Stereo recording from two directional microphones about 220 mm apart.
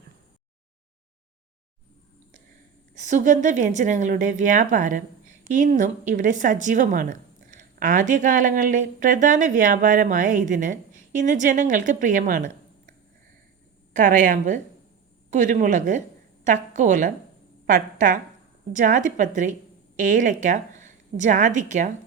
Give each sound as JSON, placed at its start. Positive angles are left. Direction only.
{"t": 2.9, "sound": "speech", "side_deg": -35}
{"t": 13.9, "sound": "a woman's voice", "side_deg": -35}